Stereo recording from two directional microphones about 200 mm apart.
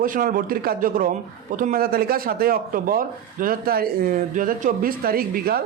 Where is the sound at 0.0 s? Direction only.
45° right (ahead or behind).